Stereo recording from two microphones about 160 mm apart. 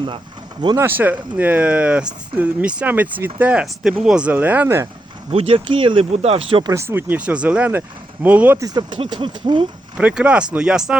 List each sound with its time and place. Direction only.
0.6 s speech: 30° right (ahead or behind)
0.9 s speech: 10° right (ahead or behind)
5.3 s speech: 40° right (ahead or behind)
6.7 s speech: 15° right (ahead or behind)
8.6 s speech: 25° right (ahead or behind)
10.0 s speech: 10° right (ahead or behind)